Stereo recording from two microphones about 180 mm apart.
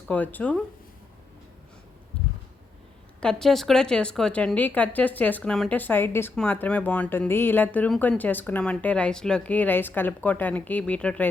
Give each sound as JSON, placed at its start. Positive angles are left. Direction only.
{"t": 0.1, "sound": "speech", "side_deg": 10}
{"t": 3.2, "sound": "speech", "side_deg": 5}